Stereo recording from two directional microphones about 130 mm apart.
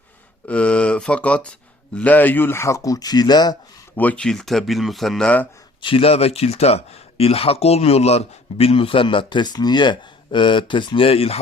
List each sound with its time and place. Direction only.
0.4 s speech: 10° left (ahead or behind); by 3.6 s 30° left (ahead or behind)
3.9 s speech: 10° left (ahead or behind)
5.8 s speech: 45° left (ahead or behind)